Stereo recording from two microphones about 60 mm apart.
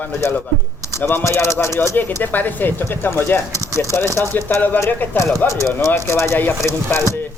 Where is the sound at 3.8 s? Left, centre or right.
Left.